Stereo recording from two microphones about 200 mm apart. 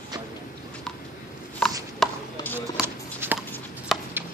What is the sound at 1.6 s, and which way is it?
Chopping, centre (ahead or behind).